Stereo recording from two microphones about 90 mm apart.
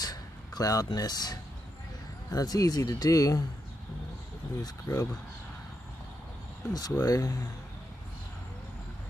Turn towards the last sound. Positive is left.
turn(degrees=40)  # may be behind; listen again after turning